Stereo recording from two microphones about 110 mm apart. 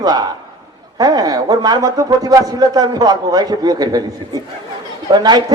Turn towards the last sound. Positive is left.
turn(degrees=-40)  # may be behind; listen again after turning